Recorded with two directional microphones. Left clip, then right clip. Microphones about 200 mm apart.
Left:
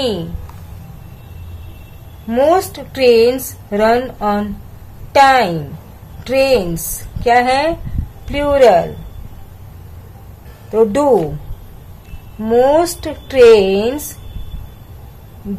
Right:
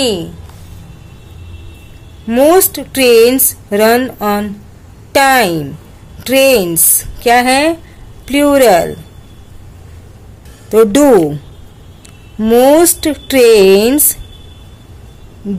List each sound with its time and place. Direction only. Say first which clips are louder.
2.2 s speech: right 4 dB; 35° right (ahead or behind)
10.7 s speech: right 5 dB; 40° right (ahead or behind)
12.4 s speech: right 4 dB; 40° right (ahead or behind)